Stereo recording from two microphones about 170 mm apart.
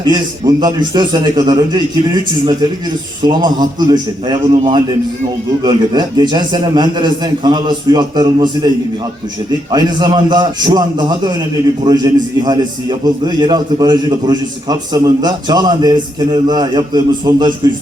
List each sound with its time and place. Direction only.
0.0 s a man's voice: 25° right (ahead or behind)
9.7 s a man's voice: 25° right (ahead or behind)